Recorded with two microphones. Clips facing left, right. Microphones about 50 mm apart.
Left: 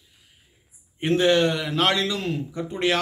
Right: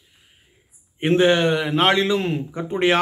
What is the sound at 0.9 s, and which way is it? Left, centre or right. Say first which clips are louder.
A man's voice: right 3 dB; right.